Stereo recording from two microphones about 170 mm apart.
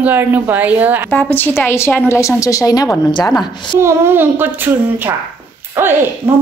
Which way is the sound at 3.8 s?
15° right (ahead or behind).